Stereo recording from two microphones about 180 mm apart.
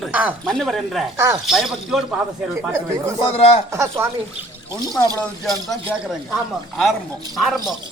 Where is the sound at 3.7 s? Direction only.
15° right (ahead or behind).